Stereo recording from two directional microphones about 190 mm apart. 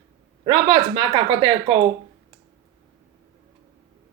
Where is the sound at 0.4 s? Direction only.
25° right (ahead or behind).